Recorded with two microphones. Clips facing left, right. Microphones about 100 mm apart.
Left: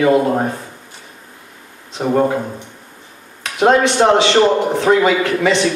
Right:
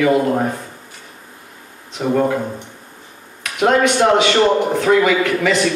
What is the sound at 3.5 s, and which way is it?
A man's voice, 30° left (ahead or behind).